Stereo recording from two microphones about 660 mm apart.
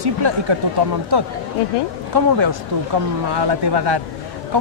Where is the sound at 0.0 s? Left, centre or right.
Right.